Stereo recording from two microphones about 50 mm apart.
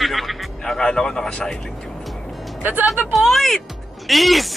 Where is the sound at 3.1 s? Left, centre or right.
Centre.